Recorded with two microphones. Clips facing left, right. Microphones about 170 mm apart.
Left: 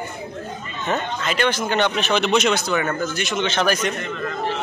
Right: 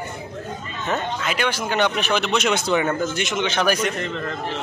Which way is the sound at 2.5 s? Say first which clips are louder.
Right 1 dB; 25° right (ahead or behind).